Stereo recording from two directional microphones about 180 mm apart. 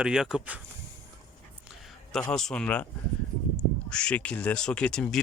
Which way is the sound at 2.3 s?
5° left (ahead or behind).